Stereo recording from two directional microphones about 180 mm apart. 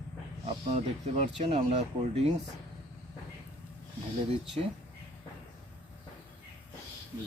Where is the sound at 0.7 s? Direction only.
40° right (ahead or behind).